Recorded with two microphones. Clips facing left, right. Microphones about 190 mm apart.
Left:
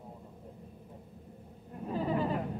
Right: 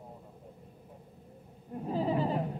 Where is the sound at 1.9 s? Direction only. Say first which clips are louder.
Right 1 dB; 30° right (ahead or behind).